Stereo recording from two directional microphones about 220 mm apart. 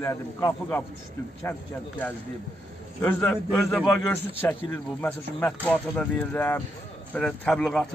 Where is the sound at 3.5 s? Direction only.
10° left (ahead or behind).